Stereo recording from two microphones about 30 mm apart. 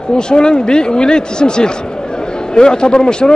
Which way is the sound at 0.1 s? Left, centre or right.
Left.